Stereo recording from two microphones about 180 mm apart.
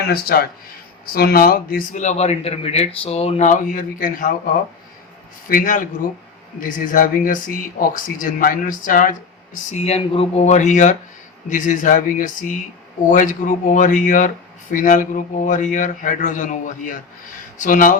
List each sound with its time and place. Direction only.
0.1 s speech: 55° left (ahead or behind)
5.5 s speech: 50° left (ahead or behind)
9.7 s speech: 35° left (ahead or behind)